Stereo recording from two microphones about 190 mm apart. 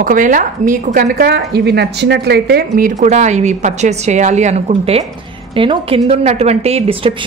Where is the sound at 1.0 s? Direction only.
55° right (ahead or behind).